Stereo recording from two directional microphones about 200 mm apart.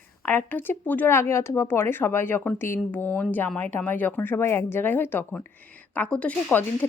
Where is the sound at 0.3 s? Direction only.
10° left (ahead or behind).